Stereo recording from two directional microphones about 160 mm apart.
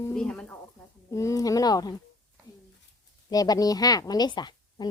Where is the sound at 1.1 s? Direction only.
20° left (ahead or behind).